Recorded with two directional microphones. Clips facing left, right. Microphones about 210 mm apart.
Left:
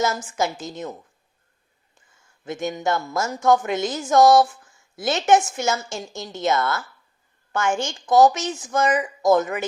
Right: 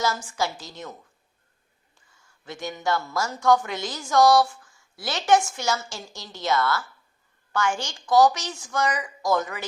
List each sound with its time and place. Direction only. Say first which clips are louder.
0.3 s a woman's voice: left 4 dB; 20° left (ahead or behind)
2.4 s a woman's voice: left 5 dB; 20° left (ahead or behind)